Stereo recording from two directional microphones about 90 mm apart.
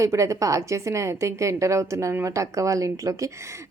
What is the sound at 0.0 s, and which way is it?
A woman's voice, 35° right (ahead or behind).